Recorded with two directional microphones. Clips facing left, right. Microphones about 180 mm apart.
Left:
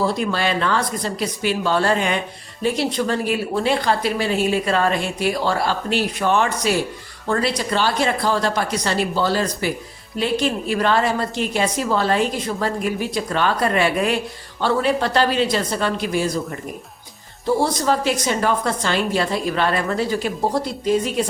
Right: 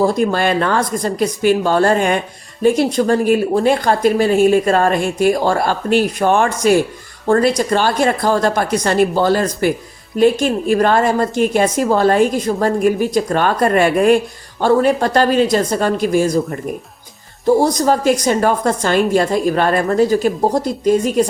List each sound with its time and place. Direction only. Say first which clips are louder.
0.0 s speech: right 6 dB; 45° right (ahead or behind)